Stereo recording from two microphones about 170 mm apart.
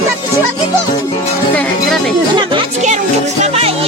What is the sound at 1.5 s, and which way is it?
Music, 5° left (ahead or behind).